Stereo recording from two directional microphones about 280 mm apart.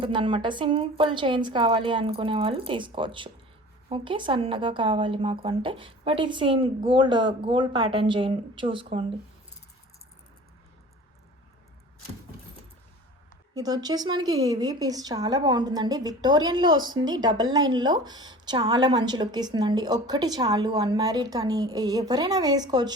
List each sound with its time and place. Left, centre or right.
0.0 s speech: centre
13.5 s speech: centre